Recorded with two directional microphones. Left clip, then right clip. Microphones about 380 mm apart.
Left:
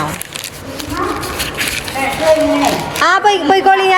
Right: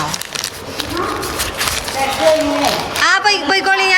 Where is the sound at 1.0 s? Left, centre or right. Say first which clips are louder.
Left 2 dB; centre.